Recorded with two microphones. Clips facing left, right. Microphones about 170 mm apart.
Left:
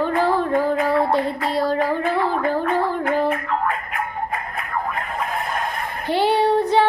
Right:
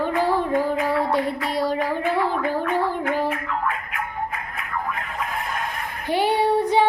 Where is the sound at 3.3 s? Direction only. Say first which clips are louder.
Left 4 dB; 40° left (ahead or behind).